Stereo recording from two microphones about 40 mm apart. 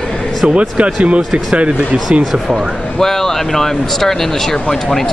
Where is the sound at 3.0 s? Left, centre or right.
Centre.